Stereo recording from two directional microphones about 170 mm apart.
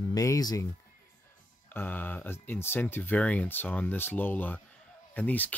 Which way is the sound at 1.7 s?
10° left (ahead or behind).